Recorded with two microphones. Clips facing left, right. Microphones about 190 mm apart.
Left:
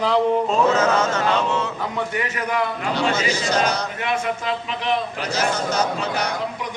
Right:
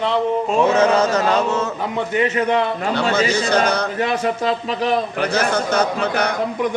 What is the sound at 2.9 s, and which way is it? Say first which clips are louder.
Speech: right 4 dB; 60° right (ahead or behind).